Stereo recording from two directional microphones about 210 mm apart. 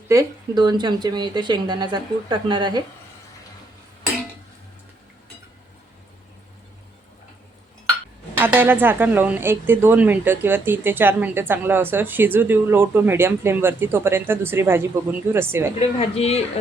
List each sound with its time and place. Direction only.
0.1 s speech: 15° right (ahead or behind)
8.4 s speech: 10° right (ahead or behind)
15.8 s speech: 30° left (ahead or behind)